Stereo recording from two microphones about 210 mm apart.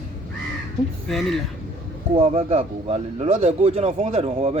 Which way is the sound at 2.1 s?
25° right (ahead or behind).